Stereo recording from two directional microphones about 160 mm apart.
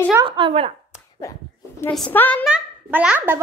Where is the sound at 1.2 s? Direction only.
20° left (ahead or behind).